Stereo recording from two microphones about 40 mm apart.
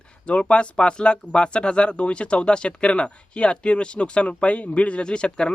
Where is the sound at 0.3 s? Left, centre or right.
Left.